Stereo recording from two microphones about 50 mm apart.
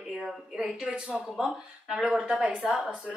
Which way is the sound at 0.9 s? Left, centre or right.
Right.